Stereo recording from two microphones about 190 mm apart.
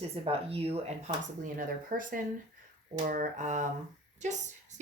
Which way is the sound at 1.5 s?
45° right (ahead or behind).